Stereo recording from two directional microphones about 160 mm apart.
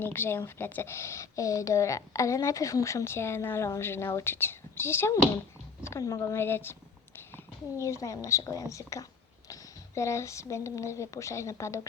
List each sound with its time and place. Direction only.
0.0 s a woman's voice: 15° left (ahead or behind)
7.8 s speech: 20° left (ahead or behind)